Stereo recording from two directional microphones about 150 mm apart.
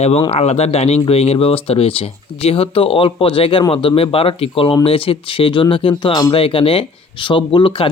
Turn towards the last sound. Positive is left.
turn(degrees=35)  # may be behind; listen again after turning